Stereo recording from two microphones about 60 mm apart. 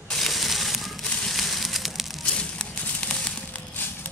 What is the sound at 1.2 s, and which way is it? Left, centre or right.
Fire, centre.